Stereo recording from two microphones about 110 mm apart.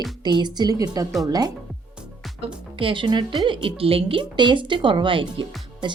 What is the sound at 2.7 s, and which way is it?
A woman's voice, 50° right (ahead or behind).